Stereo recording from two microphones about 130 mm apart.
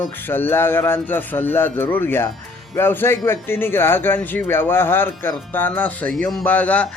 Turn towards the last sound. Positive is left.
turn(degrees=10)  # may be behind; listen again after turning